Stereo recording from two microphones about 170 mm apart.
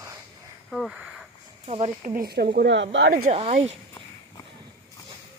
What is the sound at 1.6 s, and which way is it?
Speech, 35° right (ahead or behind).